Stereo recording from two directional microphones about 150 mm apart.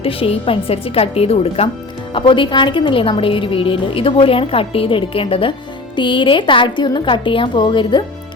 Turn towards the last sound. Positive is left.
turn(degrees=30)  # may be behind; listen again after turning